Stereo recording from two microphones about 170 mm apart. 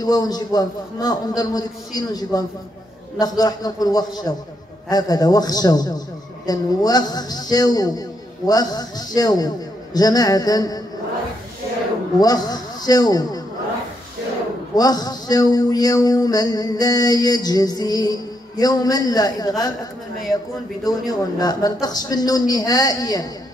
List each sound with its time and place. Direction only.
0.0 s a man's voice: 25° left (ahead or behind)
12.2 s a man's voice: 25° left (ahead or behind)
14.8 s a man's voice: 20° left (ahead or behind)
20.8 s a man's voice: 20° left (ahead or behind)